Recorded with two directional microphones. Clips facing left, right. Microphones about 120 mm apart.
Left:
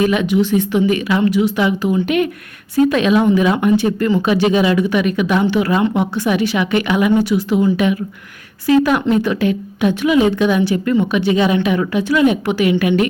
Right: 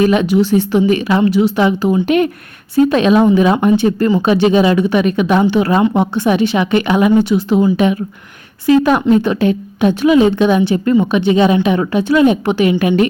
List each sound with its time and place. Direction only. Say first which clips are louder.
0.0 s a woman's voice: right 3 dB; 35° right (ahead or behind)